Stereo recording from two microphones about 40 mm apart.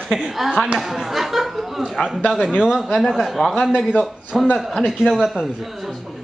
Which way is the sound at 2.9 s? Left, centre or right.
Centre.